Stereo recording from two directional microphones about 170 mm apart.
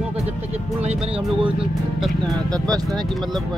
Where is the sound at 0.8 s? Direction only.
35° right (ahead or behind).